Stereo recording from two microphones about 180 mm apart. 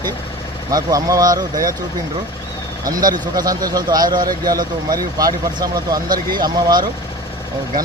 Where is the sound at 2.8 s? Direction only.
20° right (ahead or behind).